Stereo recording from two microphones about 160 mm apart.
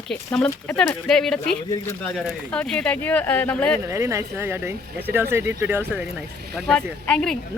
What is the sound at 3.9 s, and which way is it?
Speech, 20° right (ahead or behind).